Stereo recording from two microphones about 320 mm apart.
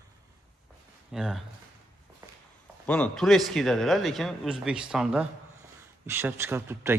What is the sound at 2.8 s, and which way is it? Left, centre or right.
A man's voice, centre.